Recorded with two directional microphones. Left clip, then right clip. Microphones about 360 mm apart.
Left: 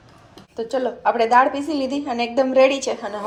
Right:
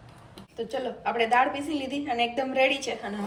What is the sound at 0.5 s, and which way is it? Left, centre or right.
A woman's voice, centre.